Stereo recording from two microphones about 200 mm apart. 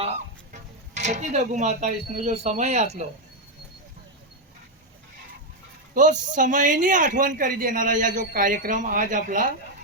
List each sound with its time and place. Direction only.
0.5 s speech: 35° right (ahead or behind)
5.9 s a man's voice: 40° right (ahead or behind)